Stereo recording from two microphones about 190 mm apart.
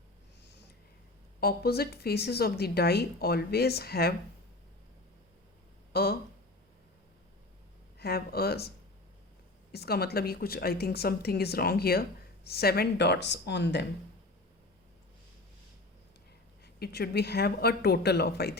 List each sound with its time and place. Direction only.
1.4 s a woman's voice: 55° left (ahead or behind)
5.9 s speech: 55° left (ahead or behind)
7.9 s speech: 55° left (ahead or behind)
9.7 s a woman's voice: 55° left (ahead or behind)
16.8 s a woman's voice: 60° left (ahead or behind)